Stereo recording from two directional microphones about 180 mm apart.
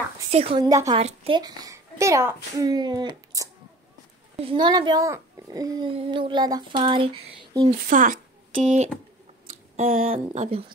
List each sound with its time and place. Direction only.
0.3 s speech: 30° right (ahead or behind)
0.7 s a child's voice: 20° right (ahead or behind)
0.9 s a child's voice: 30° right (ahead or behind)
7.8 s a woman's voice: 45° right (ahead or behind)
10.1 s speech: 35° right (ahead or behind)